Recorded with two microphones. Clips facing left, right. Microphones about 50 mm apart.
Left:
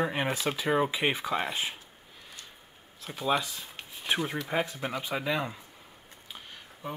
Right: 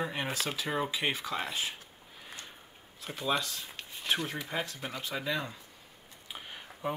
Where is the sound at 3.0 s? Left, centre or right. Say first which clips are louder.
Left 3 dB; centre.